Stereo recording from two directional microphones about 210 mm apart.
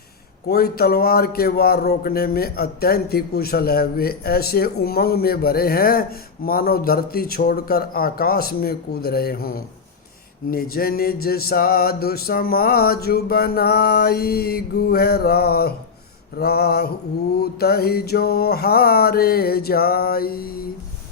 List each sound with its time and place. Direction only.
0.4 s a man's voice: 50° left (ahead or behind)